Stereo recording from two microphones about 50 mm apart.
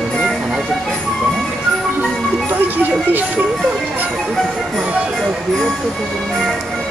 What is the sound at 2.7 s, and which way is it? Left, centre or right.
Speech, right.